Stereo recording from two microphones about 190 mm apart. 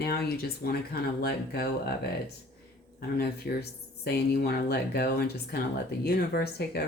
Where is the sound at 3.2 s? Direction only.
55° left (ahead or behind).